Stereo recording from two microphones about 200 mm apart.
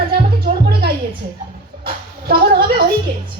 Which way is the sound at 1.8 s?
50° right (ahead or behind).